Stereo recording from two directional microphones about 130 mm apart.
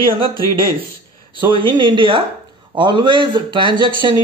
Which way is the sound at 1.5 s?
40° right (ahead or behind).